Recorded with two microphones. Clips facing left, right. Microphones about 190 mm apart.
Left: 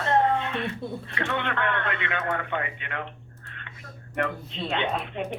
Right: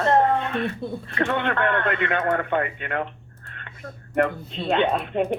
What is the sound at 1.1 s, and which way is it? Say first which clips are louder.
Speech: right 6 dB; 45° right (ahead or behind).